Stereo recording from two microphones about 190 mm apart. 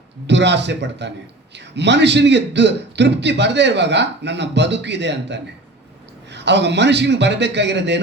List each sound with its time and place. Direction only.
0.3 s a man's voice: 65° right (ahead or behind)